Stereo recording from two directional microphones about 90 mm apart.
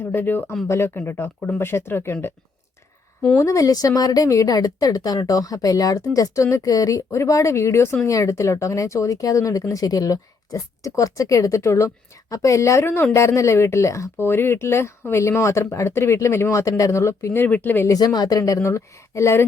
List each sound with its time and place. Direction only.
0.0 s speech: 20° left (ahead or behind)
3.3 s speech: 35° left (ahead or behind)
17.9 s speech: 45° left (ahead or behind); by 19.5 s 30° left (ahead or behind)